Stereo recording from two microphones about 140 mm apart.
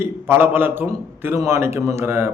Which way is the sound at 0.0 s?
15° right (ahead or behind).